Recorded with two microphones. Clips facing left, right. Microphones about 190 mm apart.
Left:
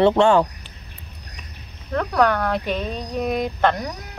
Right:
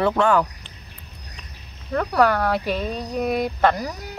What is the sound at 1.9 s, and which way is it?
Speech, centre (ahead or behind).